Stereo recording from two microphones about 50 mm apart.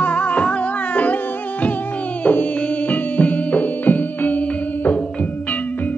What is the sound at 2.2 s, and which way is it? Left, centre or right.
Music, left.